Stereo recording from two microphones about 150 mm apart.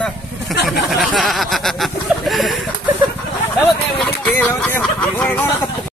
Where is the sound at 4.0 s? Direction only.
10° left (ahead or behind).